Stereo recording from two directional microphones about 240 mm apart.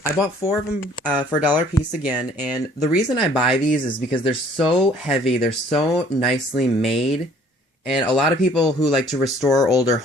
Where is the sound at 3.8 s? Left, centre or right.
Left.